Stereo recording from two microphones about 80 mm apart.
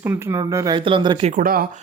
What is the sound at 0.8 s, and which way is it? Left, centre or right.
Speech, right.